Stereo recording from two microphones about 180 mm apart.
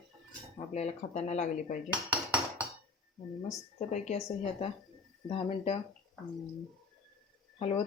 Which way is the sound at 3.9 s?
35° left (ahead or behind).